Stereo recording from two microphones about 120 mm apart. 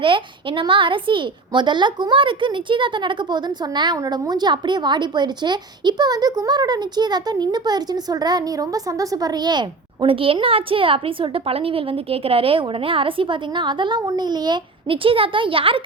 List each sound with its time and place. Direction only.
0.0 s a child's voice: 45° right (ahead or behind)